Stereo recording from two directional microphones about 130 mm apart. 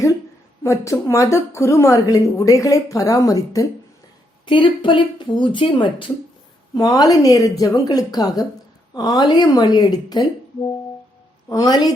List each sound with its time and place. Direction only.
0.6 s a woman's voice: 25° left (ahead or behind)
4.4 s speech: 40° left (ahead or behind)
6.7 s a woman's voice: 30° left (ahead or behind)
11.4 s a woman's voice: 30° left (ahead or behind)